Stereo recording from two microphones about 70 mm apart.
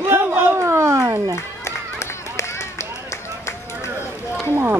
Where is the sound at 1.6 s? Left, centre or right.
Left.